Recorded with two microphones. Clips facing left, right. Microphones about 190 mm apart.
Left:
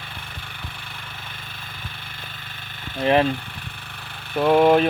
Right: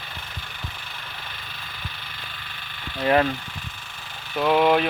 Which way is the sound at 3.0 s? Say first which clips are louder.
Left 2 dB; 20° left (ahead or behind).